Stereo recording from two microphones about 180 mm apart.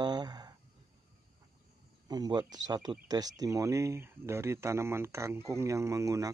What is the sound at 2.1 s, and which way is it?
Speech, 20° right (ahead or behind).